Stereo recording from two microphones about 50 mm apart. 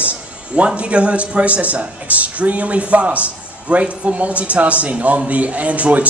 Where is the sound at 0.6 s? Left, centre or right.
Right.